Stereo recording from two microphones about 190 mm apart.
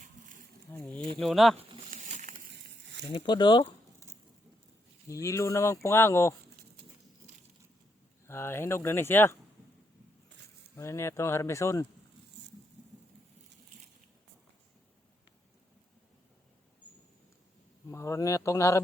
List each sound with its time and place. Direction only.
0.7 s speech: 5° left (ahead or behind)
1.9 s a sound: 40° right (ahead or behind)
3.1 s speech: 25° left (ahead or behind)
5.0 s speech: 15° left (ahead or behind)
8.3 s speech: 15° left (ahead or behind)
10.8 s speech: 15° left (ahead or behind)
17.8 s speech: 15° left (ahead or behind)